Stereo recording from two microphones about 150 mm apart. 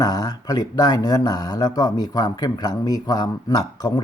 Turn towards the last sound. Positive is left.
turn(degrees=25)  # may be behind; listen again after turning